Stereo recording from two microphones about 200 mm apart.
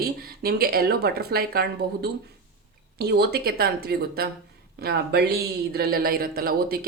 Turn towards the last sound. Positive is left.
turn(degrees=-50)  # may be behind; listen again after turning